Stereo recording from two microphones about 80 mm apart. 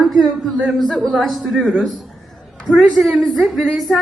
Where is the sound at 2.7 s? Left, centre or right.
Centre.